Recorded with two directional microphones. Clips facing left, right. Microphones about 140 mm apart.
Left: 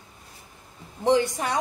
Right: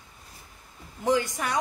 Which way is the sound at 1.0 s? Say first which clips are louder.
Left 4 dB; 30° left (ahead or behind).